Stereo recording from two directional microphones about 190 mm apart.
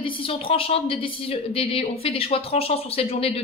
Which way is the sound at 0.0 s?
30° left (ahead or behind).